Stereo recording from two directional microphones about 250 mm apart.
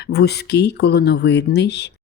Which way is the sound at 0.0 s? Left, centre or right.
Left.